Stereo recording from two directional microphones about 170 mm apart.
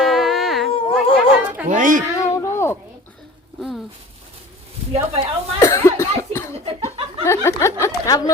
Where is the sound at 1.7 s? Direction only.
50° right (ahead or behind).